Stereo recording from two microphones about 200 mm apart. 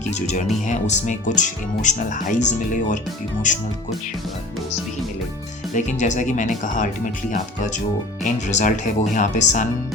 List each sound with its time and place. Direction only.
0.0 s speech: 35° left (ahead or behind)
5.7 s speech: 35° left (ahead or behind)